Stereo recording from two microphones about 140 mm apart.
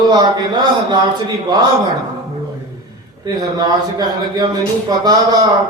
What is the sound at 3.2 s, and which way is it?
A man's voice, 30° right (ahead or behind).